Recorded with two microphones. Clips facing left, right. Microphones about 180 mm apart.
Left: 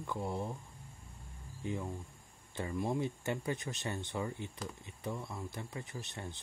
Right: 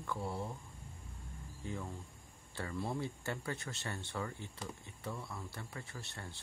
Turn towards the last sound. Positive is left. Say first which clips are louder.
# left 4 dB
turn(degrees=20)  # may be behind; listen again after turning